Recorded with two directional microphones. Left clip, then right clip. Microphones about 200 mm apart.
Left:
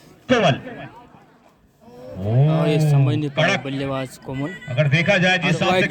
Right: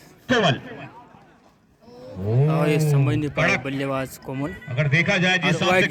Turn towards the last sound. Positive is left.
turn(degrees=30)  # may be behind; listen again after turning